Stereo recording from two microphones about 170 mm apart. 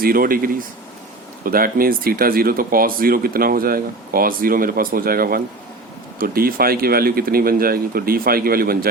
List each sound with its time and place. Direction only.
0.0 s speech: 60° right (ahead or behind)